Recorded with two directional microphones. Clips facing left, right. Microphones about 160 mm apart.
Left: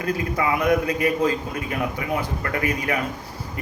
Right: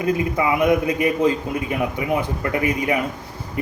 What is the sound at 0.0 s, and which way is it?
A man's voice, 20° right (ahead or behind).